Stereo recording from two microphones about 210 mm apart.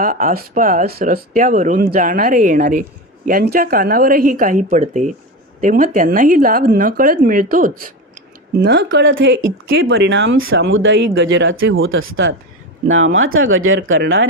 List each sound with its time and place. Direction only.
0.0 s speech: 40° right (ahead or behind)
8.5 s speech: 55° right (ahead or behind)